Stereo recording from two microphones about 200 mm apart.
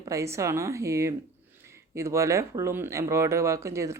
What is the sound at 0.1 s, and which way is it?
Speech, 15° right (ahead or behind).